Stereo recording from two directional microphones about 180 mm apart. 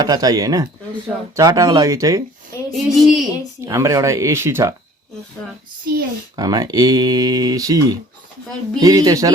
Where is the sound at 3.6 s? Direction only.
15° right (ahead or behind).